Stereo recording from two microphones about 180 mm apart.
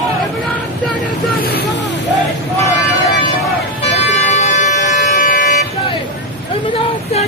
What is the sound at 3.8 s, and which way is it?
Music, 40° left (ahead or behind).